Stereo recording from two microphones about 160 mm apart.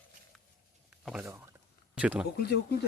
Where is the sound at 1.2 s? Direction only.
15° right (ahead or behind).